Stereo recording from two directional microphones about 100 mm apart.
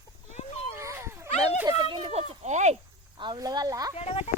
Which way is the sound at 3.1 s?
50° right (ahead or behind).